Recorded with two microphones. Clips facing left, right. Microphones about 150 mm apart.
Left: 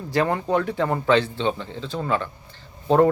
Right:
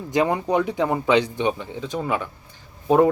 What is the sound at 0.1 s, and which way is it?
Speech, 15° right (ahead or behind).